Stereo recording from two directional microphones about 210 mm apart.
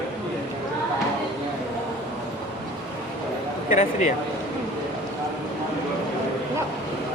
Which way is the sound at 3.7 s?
35° left (ahead or behind).